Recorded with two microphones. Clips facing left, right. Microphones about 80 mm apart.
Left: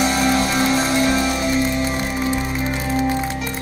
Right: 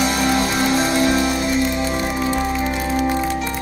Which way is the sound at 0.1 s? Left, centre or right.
Left.